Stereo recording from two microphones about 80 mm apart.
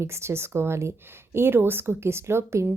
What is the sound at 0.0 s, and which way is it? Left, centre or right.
A woman's voice, right.